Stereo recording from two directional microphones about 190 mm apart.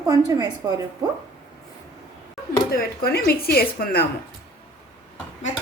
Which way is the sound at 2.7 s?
55° left (ahead or behind).